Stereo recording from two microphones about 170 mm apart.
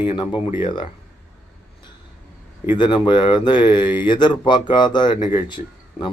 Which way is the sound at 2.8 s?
30° left (ahead or behind).